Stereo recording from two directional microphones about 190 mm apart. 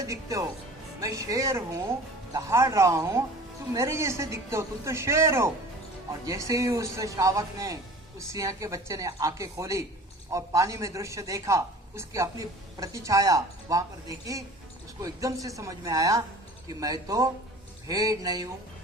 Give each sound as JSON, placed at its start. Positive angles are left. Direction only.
{"t": 0.0, "sound": "a woman's voice", "side_deg": -15}